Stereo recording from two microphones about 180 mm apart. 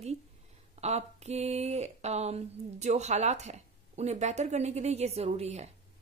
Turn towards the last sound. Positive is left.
turn(degrees=-35)  # may be behind; listen again after turning